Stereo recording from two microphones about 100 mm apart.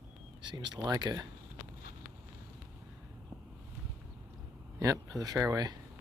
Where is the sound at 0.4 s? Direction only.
45° right (ahead or behind).